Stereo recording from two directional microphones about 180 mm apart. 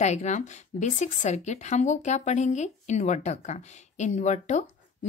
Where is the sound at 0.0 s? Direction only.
40° left (ahead or behind).